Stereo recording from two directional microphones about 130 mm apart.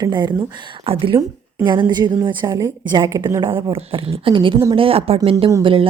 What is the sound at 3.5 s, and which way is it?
A woman's voice, 45° right (ahead or behind).